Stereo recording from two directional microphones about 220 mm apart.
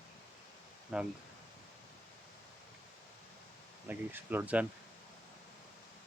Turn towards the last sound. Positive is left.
turn(degrees=-5)  # may be behind; listen again after turning